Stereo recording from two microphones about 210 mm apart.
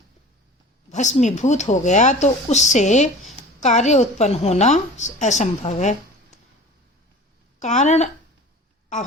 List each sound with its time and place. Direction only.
0.9 s a woman's voice: 35° left (ahead or behind)
7.6 s a woman's voice: 35° left (ahead or behind)